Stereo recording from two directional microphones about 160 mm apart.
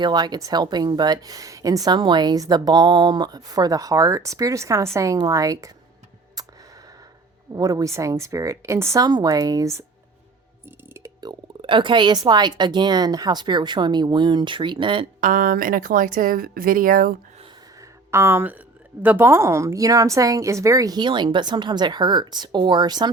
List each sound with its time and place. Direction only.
0.0 s a woman's voice: 25° right (ahead or behind)
6.4 s a sound: 25° right (ahead or behind)
7.5 s a woman's voice: 20° right (ahead or behind)
10.9 s a woman's voice: 20° right (ahead or behind)
15.2 s speech: 60° right (ahead or behind)
17.7 s a sound: 15° right (ahead or behind)
19.0 s a woman's voice: 15° right (ahead or behind)